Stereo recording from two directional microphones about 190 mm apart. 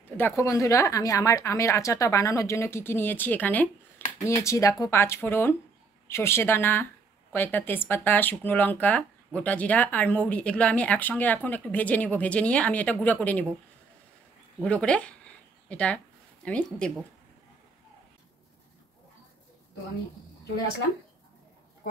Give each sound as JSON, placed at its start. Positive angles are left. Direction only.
{"t": 0.2, "sound": "speech", "side_deg": 15}
{"t": 14.6, "sound": "speech", "side_deg": 5}